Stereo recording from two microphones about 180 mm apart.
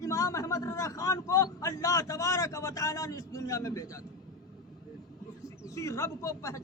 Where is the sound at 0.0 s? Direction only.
20° left (ahead or behind).